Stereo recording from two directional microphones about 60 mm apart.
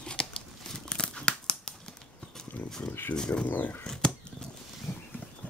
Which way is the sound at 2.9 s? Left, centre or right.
Left.